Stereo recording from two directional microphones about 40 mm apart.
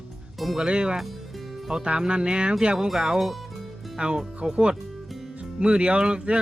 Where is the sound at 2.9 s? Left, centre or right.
Centre.